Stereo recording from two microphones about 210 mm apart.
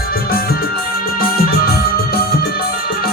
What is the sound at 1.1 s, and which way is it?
Music, 45° left (ahead or behind).